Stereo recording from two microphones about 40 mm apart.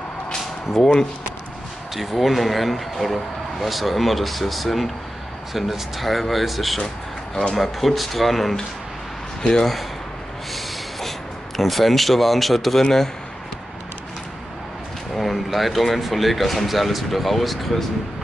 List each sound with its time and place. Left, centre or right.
0.7 s speech: centre
2.0 s speech: centre
9.4 s speech: centre
10.5 s a sound: centre
12.8 s a man's voice: centre
15.1 s speech: centre